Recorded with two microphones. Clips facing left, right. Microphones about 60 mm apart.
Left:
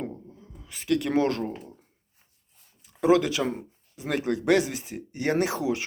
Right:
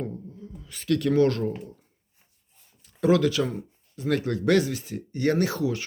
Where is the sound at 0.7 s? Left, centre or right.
Centre.